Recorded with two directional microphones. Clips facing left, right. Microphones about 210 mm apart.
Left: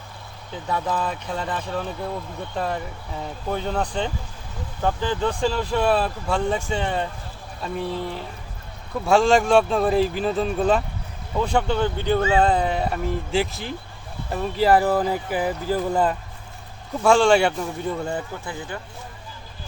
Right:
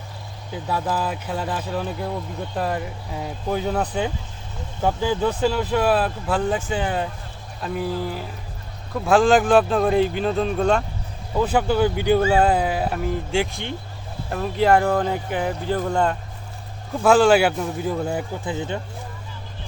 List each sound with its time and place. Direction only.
0.5 s speech: 5° right (ahead or behind)
18.4 s speech: 20° right (ahead or behind)